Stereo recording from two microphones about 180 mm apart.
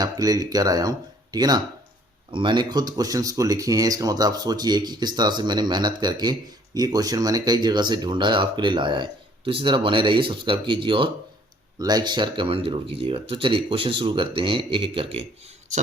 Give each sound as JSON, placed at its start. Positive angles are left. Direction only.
{"t": 0.0, "sound": "speech", "side_deg": -20}